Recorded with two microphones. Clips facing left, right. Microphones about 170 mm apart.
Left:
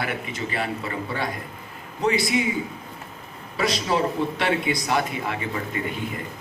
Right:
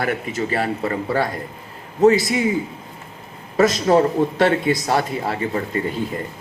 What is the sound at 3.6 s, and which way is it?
A man's voice, 45° right (ahead or behind).